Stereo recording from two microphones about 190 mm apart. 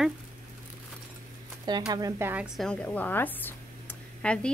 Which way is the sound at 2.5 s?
5° left (ahead or behind).